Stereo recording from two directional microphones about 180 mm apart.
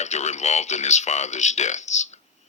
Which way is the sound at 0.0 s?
40° left (ahead or behind).